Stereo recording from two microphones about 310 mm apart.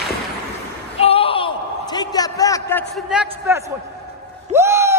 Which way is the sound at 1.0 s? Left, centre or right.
Centre.